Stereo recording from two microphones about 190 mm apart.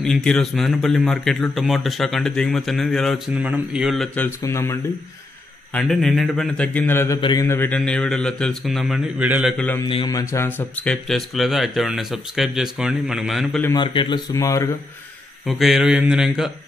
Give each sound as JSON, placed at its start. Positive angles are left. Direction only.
{"t": 0.0, "sound": "a man's voice", "side_deg": 5}
{"t": 4.4, "sound": "speech", "side_deg": 15}
{"t": 5.7, "sound": "a man's voice", "side_deg": 0}
{"t": 7.2, "sound": "speech", "side_deg": 25}
{"t": 7.4, "sound": "a man's voice", "side_deg": 10}
{"t": 9.8, "sound": "a man's voice", "side_deg": 25}
{"t": 13.7, "sound": "speech", "side_deg": 25}
{"t": 15.4, "sound": "a man's voice", "side_deg": 0}